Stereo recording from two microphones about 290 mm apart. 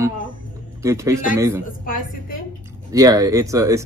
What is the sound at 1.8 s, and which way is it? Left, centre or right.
Speech, left.